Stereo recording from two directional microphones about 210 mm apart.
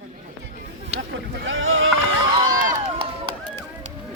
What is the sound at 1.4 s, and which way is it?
Rowboat, 70° right (ahead or behind).